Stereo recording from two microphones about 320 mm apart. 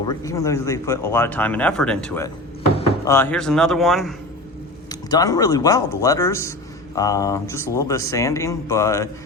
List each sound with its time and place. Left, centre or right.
0.1 s speech: centre
4.9 s speech: centre